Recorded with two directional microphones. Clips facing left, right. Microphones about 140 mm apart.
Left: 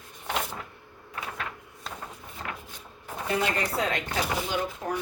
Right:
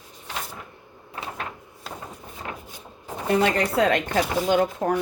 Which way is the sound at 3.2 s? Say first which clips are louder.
Right 7 dB; 65° right (ahead or behind).